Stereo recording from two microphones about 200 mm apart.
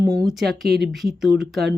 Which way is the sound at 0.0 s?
15° right (ahead or behind).